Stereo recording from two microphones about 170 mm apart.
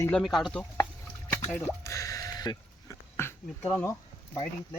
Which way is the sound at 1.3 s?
10° left (ahead or behind).